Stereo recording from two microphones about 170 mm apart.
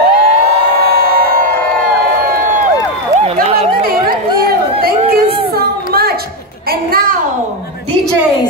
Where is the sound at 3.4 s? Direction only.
35° right (ahead or behind).